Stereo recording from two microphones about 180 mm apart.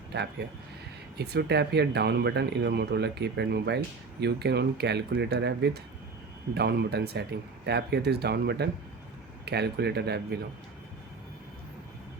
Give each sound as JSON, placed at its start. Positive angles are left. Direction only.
{"t": 1.1, "sound": "speech", "side_deg": -65}